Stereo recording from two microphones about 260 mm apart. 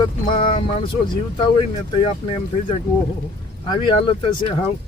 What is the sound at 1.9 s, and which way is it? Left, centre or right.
Speech, centre.